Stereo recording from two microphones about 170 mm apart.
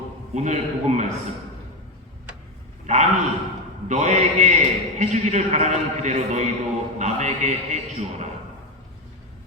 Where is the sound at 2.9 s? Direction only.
45° right (ahead or behind).